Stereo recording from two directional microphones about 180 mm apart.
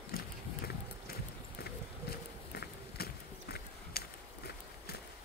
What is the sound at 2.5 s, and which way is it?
Run, 65° left (ahead or behind).